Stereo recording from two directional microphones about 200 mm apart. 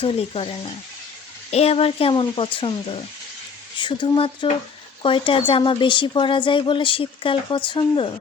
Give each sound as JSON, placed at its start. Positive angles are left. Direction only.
{"t": 0.0, "sound": "a woman's voice", "side_deg": 30}